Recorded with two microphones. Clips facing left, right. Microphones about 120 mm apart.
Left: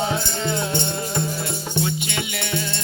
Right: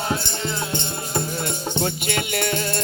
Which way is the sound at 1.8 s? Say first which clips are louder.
Right 1 dB; 50° right (ahead or behind).